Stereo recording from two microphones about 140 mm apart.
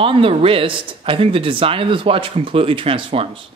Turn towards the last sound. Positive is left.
turn(degrees=-40)  # may be behind; listen again after turning